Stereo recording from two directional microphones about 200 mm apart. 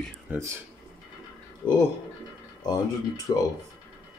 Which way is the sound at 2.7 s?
20° left (ahead or behind).